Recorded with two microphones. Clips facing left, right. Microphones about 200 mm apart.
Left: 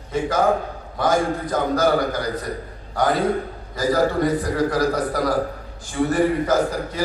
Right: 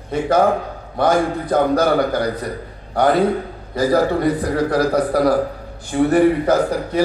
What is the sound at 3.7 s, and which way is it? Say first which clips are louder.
A man's voice: right 3 dB; 60° right (ahead or behind).